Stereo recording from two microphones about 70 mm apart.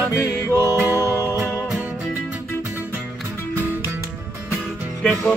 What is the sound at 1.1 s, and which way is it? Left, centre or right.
Music, left.